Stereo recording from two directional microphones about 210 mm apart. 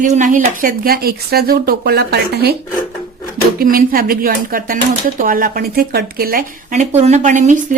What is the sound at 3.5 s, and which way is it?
Speech, 45° right (ahead or behind).